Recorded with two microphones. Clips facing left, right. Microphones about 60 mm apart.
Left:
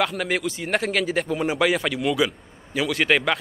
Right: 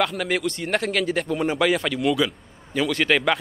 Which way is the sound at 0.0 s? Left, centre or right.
Centre.